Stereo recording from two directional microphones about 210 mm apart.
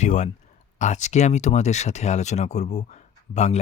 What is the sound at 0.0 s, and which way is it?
Speech, 35° left (ahead or behind).